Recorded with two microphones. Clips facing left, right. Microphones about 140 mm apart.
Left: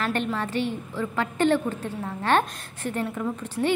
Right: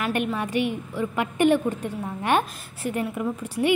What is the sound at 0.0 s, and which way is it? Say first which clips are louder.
A woman's voice: right 1 dB; 10° right (ahead or behind).